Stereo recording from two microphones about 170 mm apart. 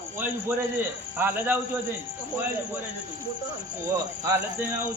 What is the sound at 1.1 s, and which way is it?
Speech, 10° right (ahead or behind).